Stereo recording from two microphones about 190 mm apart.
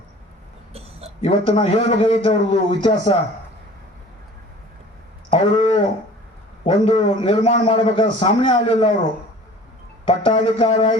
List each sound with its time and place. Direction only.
1.2 s a man's voice: 30° left (ahead or behind)
5.3 s a sound: 30° left (ahead or behind)
6.7 s a man's voice: 30° left (ahead or behind)
10.1 s a man's voice: 25° left (ahead or behind)